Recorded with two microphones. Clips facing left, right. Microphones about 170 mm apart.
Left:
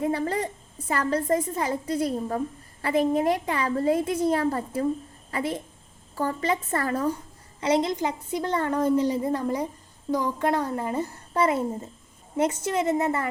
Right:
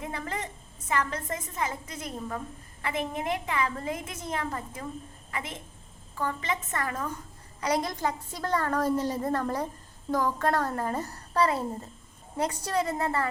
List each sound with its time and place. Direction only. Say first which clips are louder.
0.0 s a woman's voice: left 9 dB; 35° left (ahead or behind)
7.6 s a woman's voice: left 5 dB; 25° left (ahead or behind)